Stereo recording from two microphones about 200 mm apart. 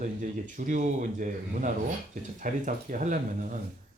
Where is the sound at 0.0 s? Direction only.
40° right (ahead or behind).